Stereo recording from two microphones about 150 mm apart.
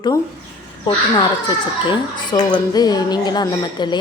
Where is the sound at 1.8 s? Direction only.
30° left (ahead or behind).